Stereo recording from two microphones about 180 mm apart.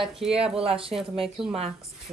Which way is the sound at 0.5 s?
30° right (ahead or behind).